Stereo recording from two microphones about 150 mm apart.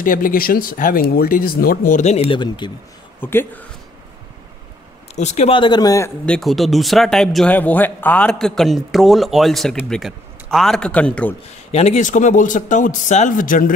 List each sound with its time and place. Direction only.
0.0 s speech: 70° left (ahead or behind); by 2.7 s 30° left (ahead or behind)
3.2 s speech: 15° left (ahead or behind)
5.1 s speech: 50° left (ahead or behind)
5.5 s speech: 30° left (ahead or behind)
6.2 s speech: 5° left (ahead or behind)
11.7 s speech: 45° left (ahead or behind); by 13.7 s 60° left (ahead or behind)